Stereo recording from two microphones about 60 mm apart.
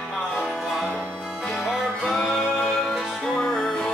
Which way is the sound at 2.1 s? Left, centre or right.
Centre.